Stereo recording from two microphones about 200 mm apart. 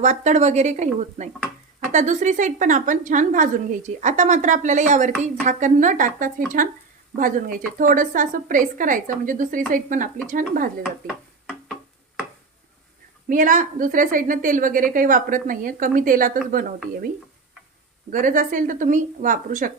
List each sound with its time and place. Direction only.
0.0 s a woman's voice: 35° right (ahead or behind)
13.2 s a woman's voice: 45° right (ahead or behind)
18.1 s a woman's voice: 40° right (ahead or behind)